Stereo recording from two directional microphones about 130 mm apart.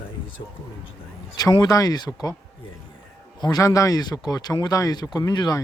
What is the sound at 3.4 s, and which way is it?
Speech, 30° left (ahead or behind).